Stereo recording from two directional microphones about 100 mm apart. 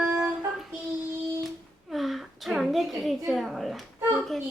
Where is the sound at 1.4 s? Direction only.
Centre (ahead or behind).